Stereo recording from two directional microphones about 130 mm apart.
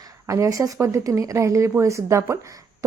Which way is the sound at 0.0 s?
25° right (ahead or behind).